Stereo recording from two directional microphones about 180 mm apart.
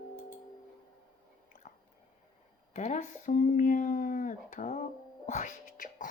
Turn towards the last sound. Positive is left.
turn(degrees=45)  # may be behind; listen again after turning